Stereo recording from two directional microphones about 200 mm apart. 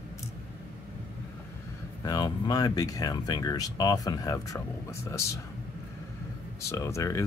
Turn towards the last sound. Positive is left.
turn(degrees=15)  # may be behind; listen again after turning